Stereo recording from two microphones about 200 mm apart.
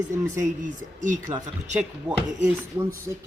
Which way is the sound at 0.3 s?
40° right (ahead or behind).